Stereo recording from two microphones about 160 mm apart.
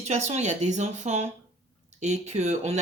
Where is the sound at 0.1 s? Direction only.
45° right (ahead or behind).